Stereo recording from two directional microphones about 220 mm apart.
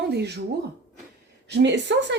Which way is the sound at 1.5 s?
55° right (ahead or behind).